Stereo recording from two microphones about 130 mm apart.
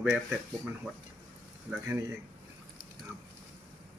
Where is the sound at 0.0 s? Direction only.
5° right (ahead or behind).